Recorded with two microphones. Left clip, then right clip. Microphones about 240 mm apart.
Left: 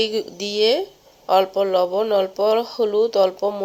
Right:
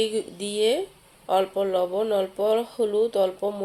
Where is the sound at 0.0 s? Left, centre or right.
Centre.